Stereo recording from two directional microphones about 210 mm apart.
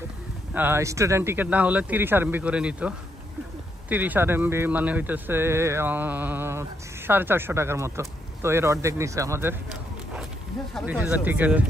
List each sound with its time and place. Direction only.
0.6 s speech: 10° right (ahead or behind)
3.9 s speech: 10° right (ahead or behind)
10.7 s speech: 5° right (ahead or behind)